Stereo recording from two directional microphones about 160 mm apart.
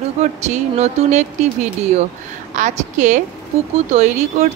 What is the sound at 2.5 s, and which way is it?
Speech, 50° right (ahead or behind).